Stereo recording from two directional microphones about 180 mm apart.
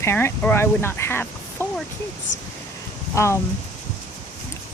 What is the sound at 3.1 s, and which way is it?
Speech, 15° left (ahead or behind).